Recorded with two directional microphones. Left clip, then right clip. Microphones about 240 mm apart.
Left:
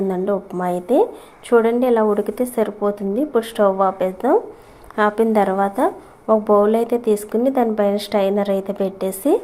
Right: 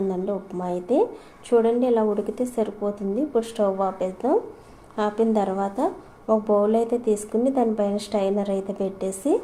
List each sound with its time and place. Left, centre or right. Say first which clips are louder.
0.1 s a woman's voice: left 6 dB; centre